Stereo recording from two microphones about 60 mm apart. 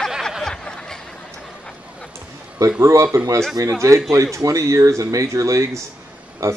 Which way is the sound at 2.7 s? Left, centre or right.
Right.